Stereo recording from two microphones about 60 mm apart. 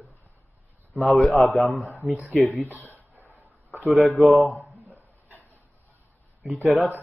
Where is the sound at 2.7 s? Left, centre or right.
Left.